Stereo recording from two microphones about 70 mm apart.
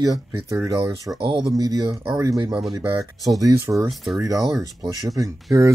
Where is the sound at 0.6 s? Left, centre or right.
Right.